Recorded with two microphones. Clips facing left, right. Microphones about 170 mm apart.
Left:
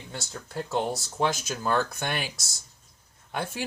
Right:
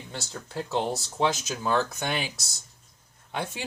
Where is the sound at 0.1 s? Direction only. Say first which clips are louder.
Even; centre (ahead or behind).